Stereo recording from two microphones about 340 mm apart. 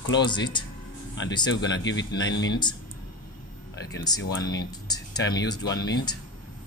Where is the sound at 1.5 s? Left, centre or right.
Left.